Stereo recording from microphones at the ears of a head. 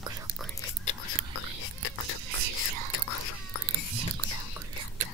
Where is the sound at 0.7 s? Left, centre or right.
Left.